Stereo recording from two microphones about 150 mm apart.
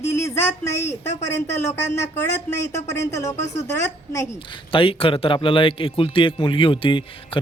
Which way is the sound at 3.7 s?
20° left (ahead or behind).